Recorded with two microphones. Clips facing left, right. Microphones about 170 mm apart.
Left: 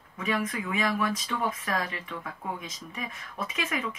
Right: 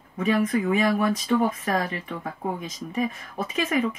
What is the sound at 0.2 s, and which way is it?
Speech, 35° right (ahead or behind).